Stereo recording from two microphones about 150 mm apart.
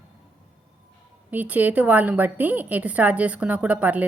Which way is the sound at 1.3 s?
10° right (ahead or behind).